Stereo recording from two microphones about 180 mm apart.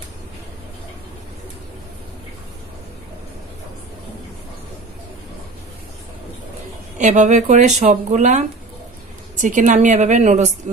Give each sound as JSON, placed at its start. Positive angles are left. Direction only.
{"t": 7.0, "sound": "a woman's voice", "side_deg": -40}